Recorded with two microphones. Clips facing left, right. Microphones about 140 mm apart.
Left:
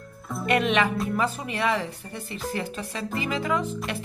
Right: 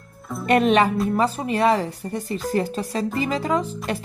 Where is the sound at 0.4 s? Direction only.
40° right (ahead or behind).